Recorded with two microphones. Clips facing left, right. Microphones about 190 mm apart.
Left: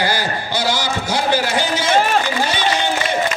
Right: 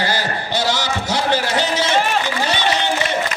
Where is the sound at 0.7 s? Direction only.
75° right (ahead or behind).